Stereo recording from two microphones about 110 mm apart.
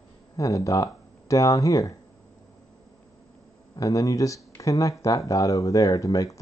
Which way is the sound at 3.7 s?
30° left (ahead or behind).